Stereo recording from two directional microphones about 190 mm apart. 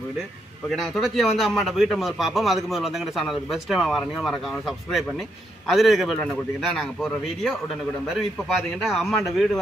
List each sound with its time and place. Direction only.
0.7 s a man's voice: centre (ahead or behind)
8.8 s a man's voice: centre (ahead or behind)